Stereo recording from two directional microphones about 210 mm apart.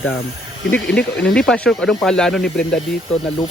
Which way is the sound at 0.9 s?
5° left (ahead or behind).